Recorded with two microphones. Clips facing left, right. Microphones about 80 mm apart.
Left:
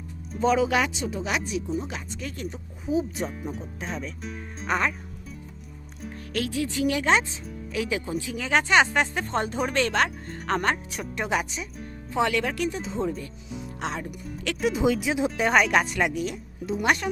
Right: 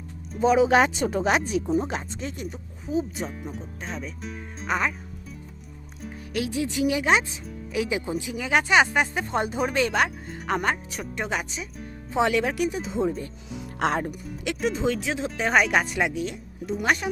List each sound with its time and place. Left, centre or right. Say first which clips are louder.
0.3 s speech: right 3 dB; centre
0.9 s speech: right 6 dB; right
2.8 s speech: left 1 dB; centre
6.3 s speech: right 1 dB; centre
12.1 s speech: right 2 dB; centre
13.7 s speech: right 8 dB; right
14.6 s speech: left 2 dB; centre